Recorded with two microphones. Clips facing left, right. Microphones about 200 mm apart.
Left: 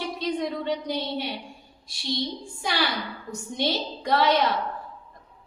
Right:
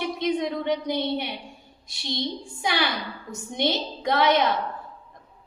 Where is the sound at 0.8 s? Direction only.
60° right (ahead or behind).